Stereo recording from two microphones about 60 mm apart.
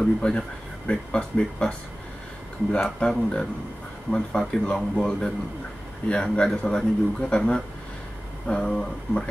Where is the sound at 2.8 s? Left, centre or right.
Centre.